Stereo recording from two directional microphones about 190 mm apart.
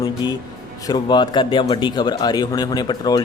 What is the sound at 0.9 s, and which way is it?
A man's voice, 20° left (ahead or behind).